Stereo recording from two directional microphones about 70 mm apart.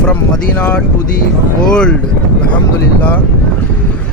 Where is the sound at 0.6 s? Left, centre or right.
Centre.